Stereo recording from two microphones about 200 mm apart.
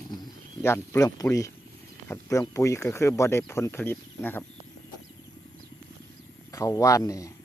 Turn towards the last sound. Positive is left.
turn(degrees=15)  # may be behind; listen again after turning